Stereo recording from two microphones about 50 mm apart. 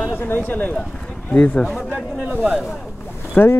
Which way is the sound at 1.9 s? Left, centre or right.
Right.